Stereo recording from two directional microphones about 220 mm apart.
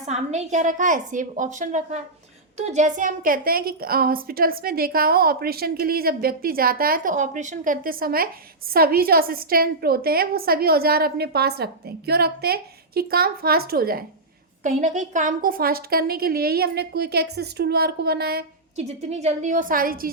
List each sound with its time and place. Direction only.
0.0 s a woman's voice: 30° right (ahead or behind)
18.8 s a woman's voice: 30° right (ahead or behind)